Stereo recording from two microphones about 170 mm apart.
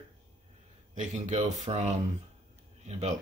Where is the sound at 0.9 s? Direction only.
45° right (ahead or behind).